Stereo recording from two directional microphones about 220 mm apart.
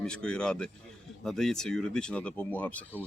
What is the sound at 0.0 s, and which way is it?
Speech, 5° left (ahead or behind).